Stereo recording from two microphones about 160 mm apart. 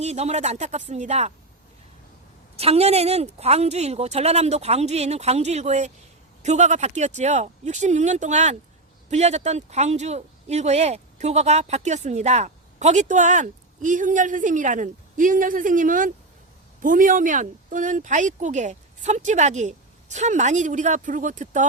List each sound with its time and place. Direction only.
0.0 s speech: 45° right (ahead or behind)
2.6 s speech: 40° right (ahead or behind)